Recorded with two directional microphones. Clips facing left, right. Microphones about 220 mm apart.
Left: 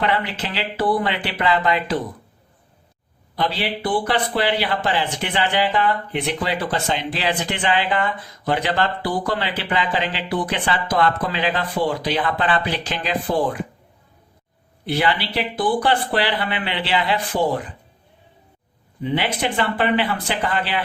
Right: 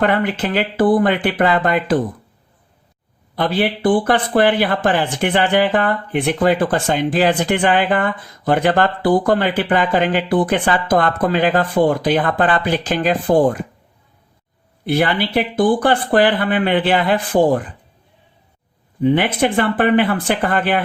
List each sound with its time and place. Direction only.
0.0 s speech: 50° right (ahead or behind)
3.3 s speech: 50° right (ahead or behind)
14.8 s speech: 50° right (ahead or behind)
19.0 s speech: 50° right (ahead or behind)